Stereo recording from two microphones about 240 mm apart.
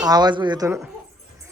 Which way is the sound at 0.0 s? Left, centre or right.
Centre.